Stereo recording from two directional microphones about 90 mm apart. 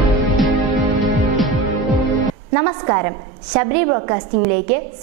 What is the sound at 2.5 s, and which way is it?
A woman's voice, 20° right (ahead or behind).